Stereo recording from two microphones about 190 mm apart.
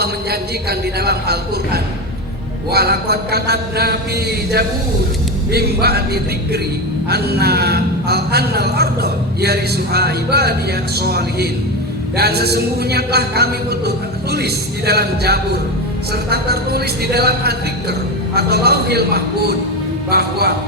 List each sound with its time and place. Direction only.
0.0 s a man's voice: 55° right (ahead or behind)
7.1 s a man's voice: 55° right (ahead or behind)